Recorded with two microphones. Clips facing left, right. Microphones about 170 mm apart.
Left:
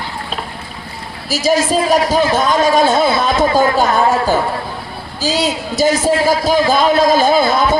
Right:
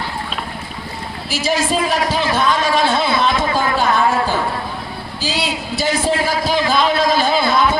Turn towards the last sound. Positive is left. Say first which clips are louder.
# left 3 dB
turn(degrees=40)  # may be behind; listen again after turning